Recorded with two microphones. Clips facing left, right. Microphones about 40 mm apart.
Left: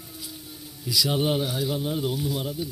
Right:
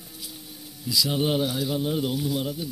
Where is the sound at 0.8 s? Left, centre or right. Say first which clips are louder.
Even; left.